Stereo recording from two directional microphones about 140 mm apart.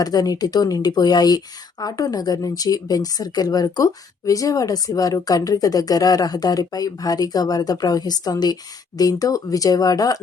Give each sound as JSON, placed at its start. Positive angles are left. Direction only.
{"t": 0.0, "sound": "speech", "side_deg": 25}